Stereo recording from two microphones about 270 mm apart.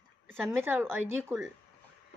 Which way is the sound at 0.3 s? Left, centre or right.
Centre.